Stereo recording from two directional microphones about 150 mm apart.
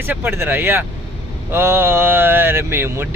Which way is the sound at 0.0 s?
15° right (ahead or behind).